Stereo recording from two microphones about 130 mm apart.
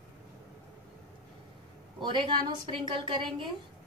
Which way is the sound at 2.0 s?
35° right (ahead or behind).